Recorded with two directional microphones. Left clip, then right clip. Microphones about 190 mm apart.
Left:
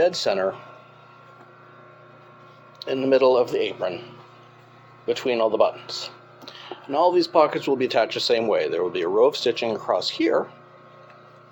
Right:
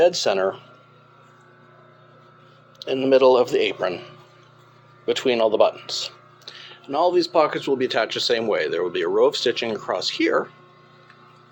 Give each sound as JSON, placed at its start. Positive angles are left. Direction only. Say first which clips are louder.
{"t": 0.0, "sound": "speech", "louder": "right 3 dB", "side_deg": -10}
{"t": 2.7, "sound": "speech", "louder": "right 2 dB", "side_deg": -5}
{"t": 5.0, "sound": "speech", "louder": "right 2 dB", "side_deg": -20}
{"t": 6.4, "sound": "speech", "louder": "left 2 dB", "side_deg": -5}